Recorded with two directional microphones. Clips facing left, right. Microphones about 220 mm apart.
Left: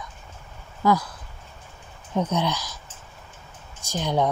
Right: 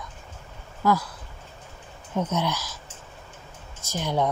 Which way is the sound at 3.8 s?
15° left (ahead or behind).